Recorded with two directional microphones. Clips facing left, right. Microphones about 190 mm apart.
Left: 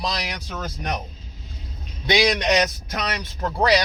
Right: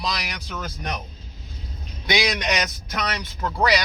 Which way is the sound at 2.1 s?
30° left (ahead or behind).